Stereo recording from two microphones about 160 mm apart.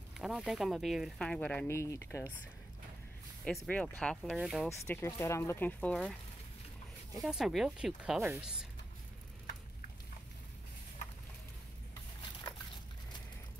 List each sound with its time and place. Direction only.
0.2 s speech: centre (ahead or behind)
1.7 s speech: 15° left (ahead or behind)
3.4 s speech: 5° left (ahead or behind)
4.6 s speech: 15° left (ahead or behind)
7.2 s speech: centre (ahead or behind)